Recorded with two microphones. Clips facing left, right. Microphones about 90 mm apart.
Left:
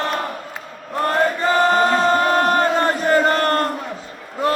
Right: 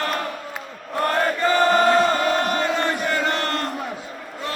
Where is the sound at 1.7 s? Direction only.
40° left (ahead or behind).